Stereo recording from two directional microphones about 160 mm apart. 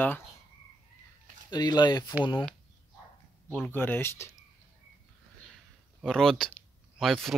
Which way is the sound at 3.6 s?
10° left (ahead or behind).